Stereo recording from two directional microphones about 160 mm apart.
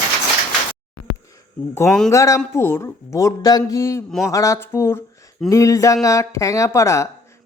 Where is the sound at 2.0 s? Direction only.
20° left (ahead or behind).